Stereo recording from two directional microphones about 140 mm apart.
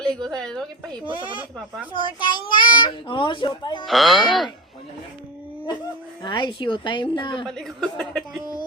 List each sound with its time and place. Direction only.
0.0 s a woman's voice: 5° left (ahead or behind)
2.1 s a child's voice: 35° left (ahead or behind)
3.8 s a woman's voice: centre (ahead or behind)
6.2 s a child's voice: 30° left (ahead or behind)
7.4 s a woman's voice: 5° left (ahead or behind)